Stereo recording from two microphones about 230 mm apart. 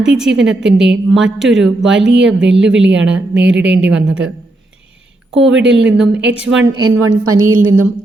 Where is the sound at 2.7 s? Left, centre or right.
Right.